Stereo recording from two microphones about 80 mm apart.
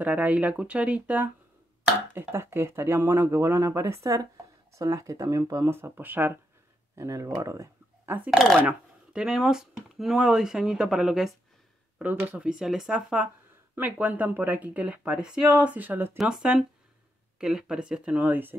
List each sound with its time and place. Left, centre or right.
0.0 s speech: centre
2.1 s speech: right
5.7 s speech: right
7.0 s speech: right
8.3 s speech: centre
8.6 s speech: centre
12.0 s speech: centre
13.7 s speech: right
16.2 s speech: centre